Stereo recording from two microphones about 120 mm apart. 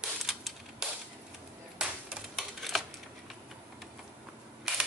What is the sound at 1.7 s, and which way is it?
Typewriter, 5° right (ahead or behind).